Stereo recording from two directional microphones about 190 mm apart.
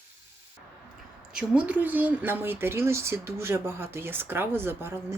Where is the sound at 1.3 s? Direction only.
5° right (ahead or behind).